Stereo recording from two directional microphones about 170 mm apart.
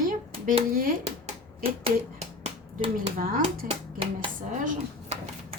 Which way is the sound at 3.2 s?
55° right (ahead or behind).